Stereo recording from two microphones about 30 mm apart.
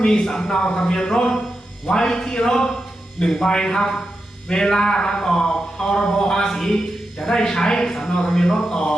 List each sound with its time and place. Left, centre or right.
0.0 s speech: left